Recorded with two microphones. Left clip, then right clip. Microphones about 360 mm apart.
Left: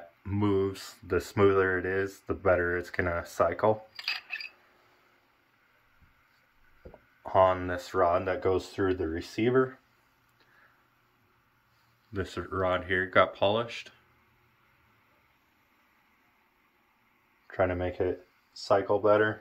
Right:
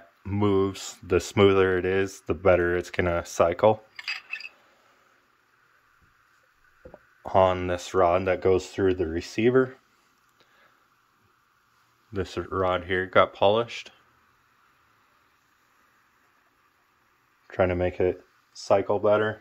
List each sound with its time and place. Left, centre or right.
0.2 s speech: centre
7.2 s speech: right
12.1 s speech: centre
17.5 s speech: right